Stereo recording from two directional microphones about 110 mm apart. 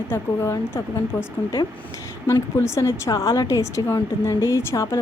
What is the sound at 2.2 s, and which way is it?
A woman's voice, 25° left (ahead or behind).